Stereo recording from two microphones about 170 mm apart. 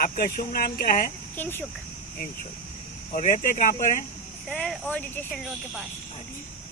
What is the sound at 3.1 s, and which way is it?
Speech, 45° left (ahead or behind).